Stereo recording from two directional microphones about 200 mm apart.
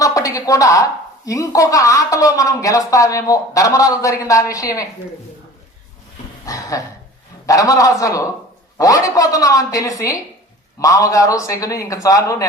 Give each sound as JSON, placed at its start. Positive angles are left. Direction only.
{"t": 0.0, "sound": "a woman's voice", "side_deg": 15}
{"t": 6.4, "sound": "dog", "side_deg": 15}
{"t": 7.4, "sound": "a woman's voice", "side_deg": 15}